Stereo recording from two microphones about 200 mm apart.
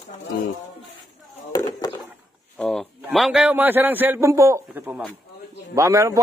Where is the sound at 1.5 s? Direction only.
15° left (ahead or behind).